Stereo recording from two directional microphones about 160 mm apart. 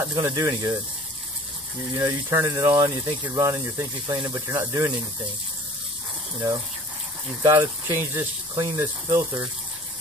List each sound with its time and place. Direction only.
0.1 s speech: 20° right (ahead or behind)
2.0 s speech: 15° right (ahead or behind)
7.4 s speech: 20° right (ahead or behind)